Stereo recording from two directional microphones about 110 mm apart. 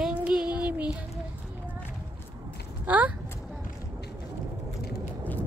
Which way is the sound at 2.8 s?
15° right (ahead or behind).